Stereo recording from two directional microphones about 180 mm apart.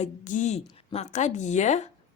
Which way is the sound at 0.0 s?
40° left (ahead or behind).